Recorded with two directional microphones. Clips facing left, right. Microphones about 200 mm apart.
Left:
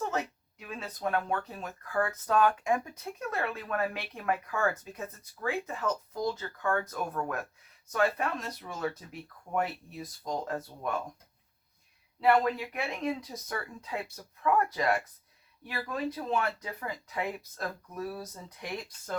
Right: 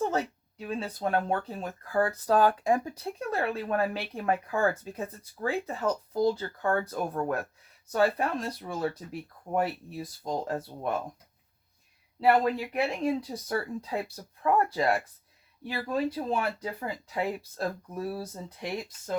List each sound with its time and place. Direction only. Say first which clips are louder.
0.0 s speech: right 4 dB; 30° right (ahead or behind)
12.2 s speech: right 2 dB; 30° right (ahead or behind)